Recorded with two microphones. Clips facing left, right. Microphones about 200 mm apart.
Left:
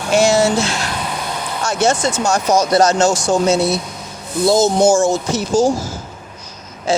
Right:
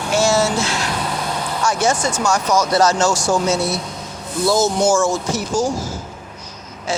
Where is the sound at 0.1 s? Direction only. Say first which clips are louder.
Left 4 dB; 15° left (ahead or behind).